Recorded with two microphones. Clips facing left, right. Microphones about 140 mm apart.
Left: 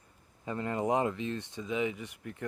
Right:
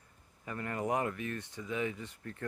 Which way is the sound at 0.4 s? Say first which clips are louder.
Left 4 dB; 20° left (ahead or behind).